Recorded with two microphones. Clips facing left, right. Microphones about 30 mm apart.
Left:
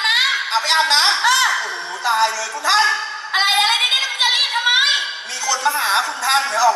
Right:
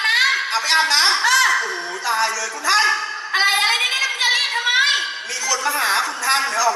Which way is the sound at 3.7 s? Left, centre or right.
Left.